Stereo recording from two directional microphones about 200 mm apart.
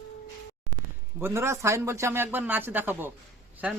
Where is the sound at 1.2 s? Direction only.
15° right (ahead or behind).